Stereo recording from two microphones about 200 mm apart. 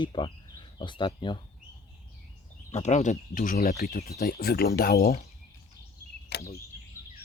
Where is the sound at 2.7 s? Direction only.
35° left (ahead or behind).